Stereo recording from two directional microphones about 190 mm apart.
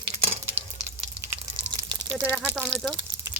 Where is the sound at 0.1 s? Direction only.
35° right (ahead or behind).